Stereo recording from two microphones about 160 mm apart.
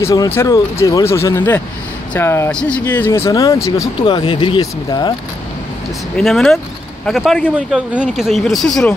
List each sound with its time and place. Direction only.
0.0 s speech: 20° left (ahead or behind)
4.0 s speech: 30° left (ahead or behind)
6.1 s speech: centre (ahead or behind)